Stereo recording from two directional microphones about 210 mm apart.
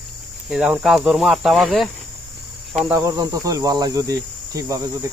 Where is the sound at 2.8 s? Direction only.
15° right (ahead or behind).